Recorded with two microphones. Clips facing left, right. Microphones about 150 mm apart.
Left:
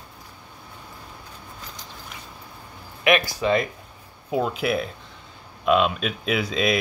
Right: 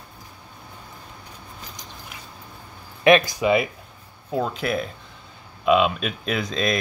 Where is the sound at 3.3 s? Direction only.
10° right (ahead or behind).